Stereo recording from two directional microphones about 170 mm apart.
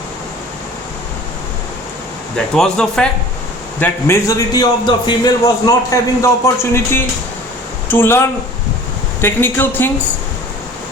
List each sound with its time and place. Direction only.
2.3 s a man's voice: 5° left (ahead or behind)